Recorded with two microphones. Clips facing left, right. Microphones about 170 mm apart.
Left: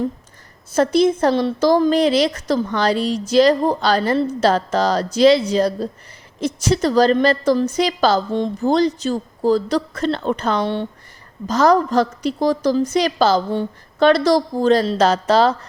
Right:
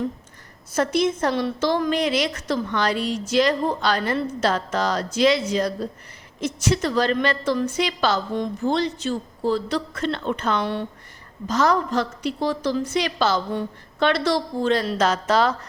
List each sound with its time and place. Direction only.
0.7 s a woman's voice: 30° left (ahead or behind)